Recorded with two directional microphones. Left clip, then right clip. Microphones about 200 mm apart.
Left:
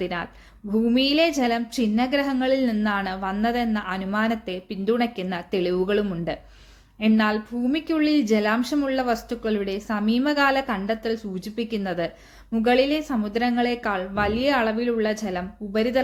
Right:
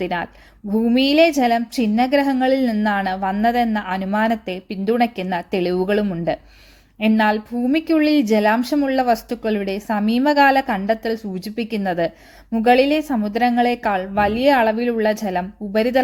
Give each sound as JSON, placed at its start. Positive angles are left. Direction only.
{"t": 0.0, "sound": "a woman's voice", "side_deg": -35}